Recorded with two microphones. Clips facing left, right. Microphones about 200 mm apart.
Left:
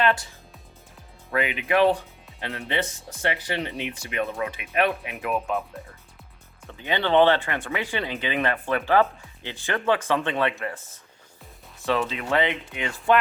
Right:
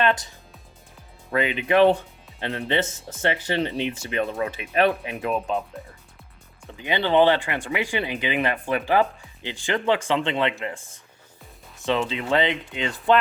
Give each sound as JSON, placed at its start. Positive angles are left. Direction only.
{"t": 0.0, "sound": "speech", "side_deg": -20}
{"t": 1.3, "sound": "speech", "side_deg": -25}
{"t": 6.7, "sound": "speech", "side_deg": -15}
{"t": 11.9, "sound": "speech", "side_deg": -25}